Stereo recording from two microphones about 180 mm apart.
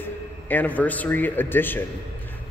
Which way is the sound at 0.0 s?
10° left (ahead or behind).